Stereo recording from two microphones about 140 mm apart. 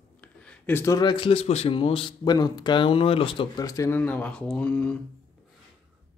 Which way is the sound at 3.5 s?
25° left (ahead or behind).